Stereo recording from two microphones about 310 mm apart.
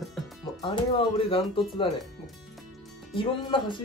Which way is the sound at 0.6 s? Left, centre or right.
Centre.